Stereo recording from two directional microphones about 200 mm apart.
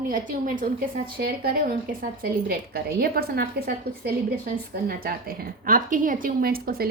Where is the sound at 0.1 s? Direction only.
40° right (ahead or behind).